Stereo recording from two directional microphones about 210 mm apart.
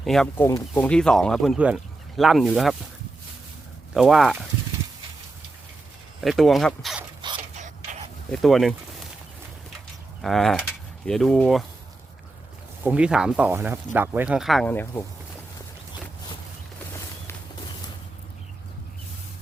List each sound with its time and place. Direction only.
0.0 s speech: centre (ahead or behind)
3.9 s speech: centre (ahead or behind)
6.2 s speech: centre (ahead or behind)
7.2 s a sound: 20° right (ahead or behind)
7.5 s a sound: 35° right (ahead or behind)
8.3 s speech: centre (ahead or behind)
10.2 s speech: centre (ahead or behind)
12.8 s speech: 5° right (ahead or behind)